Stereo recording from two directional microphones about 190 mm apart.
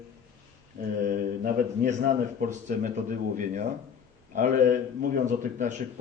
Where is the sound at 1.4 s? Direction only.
45° right (ahead or behind).